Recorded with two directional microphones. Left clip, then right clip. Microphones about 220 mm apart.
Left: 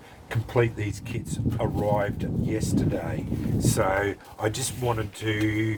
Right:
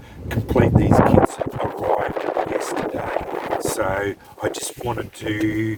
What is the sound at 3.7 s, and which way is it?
Speech, 40° right (ahead or behind).